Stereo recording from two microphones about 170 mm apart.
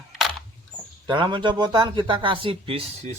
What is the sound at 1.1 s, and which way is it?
A man's voice, 30° right (ahead or behind).